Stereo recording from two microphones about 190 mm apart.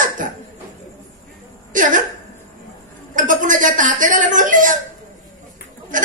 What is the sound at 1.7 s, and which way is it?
Speech, 45° right (ahead or behind).